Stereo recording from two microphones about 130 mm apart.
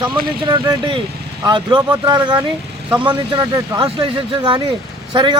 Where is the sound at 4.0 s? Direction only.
40° right (ahead or behind).